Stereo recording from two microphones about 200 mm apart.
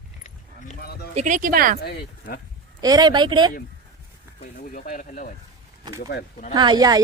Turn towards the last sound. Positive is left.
turn(degrees=-20)  # may be behind; listen again after turning